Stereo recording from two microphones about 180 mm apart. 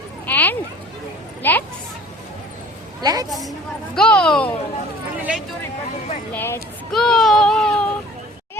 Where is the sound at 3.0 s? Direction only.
20° right (ahead or behind).